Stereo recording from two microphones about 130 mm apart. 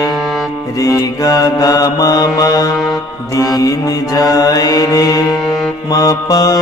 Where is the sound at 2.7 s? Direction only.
Centre (ahead or behind).